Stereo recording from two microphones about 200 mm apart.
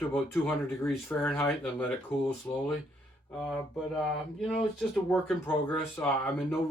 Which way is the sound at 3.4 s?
Centre (ahead or behind).